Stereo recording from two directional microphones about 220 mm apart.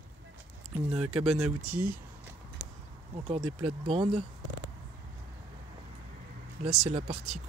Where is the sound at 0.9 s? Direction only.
5° right (ahead or behind).